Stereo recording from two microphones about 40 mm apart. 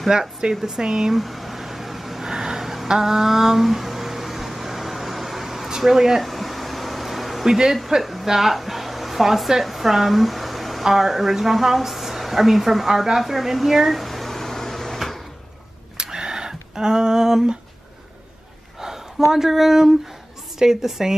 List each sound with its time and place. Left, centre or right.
0.1 s speech: centre
1.2 s a sound: centre
8.0 s speech: centre
15.0 s sliding door: centre
16.0 s a sound: centre
18.8 s speech: centre